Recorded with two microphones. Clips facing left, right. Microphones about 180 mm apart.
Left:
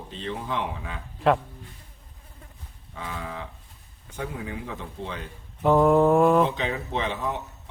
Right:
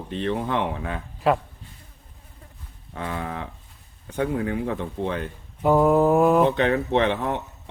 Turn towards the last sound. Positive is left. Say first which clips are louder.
# right 7 dB
turn(degrees=-65)  # may be behind; listen again after turning